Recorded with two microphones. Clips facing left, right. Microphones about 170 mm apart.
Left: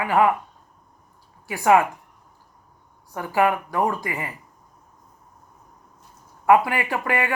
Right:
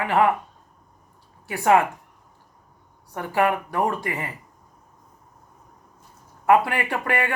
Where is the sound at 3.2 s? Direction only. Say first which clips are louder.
Left 1 dB; 15° left (ahead or behind).